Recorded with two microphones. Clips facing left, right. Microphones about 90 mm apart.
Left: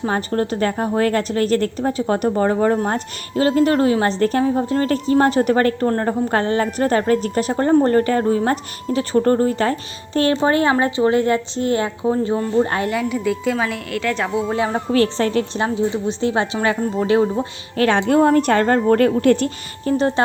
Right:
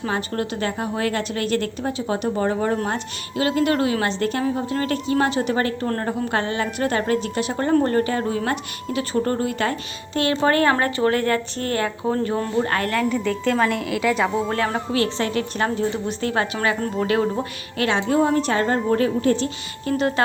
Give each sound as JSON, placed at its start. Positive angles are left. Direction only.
{"t": 0.0, "sound": "a woman's voice", "side_deg": 35}
{"t": 10.4, "sound": "speech", "side_deg": 20}
{"t": 13.0, "sound": "a woman's voice", "side_deg": 5}
{"t": 14.5, "sound": "speech", "side_deg": 15}
{"t": 14.9, "sound": "a woman's voice", "side_deg": 40}
{"t": 15.5, "sound": "speech", "side_deg": 15}
{"t": 16.8, "sound": "a woman's voice", "side_deg": 0}
{"t": 17.7, "sound": "a woman's voice", "side_deg": 50}
{"t": 19.8, "sound": "speech", "side_deg": 30}